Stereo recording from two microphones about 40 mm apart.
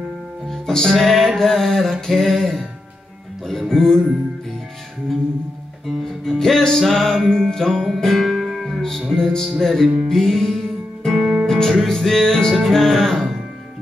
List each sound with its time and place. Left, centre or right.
0.5 s music: centre
6.2 s music: centre
9.1 s music: centre
11.4 s music: centre
11.7 s music: centre